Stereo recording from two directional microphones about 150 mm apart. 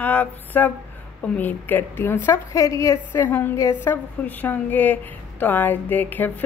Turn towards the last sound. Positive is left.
turn(degrees=10)  # may be behind; listen again after turning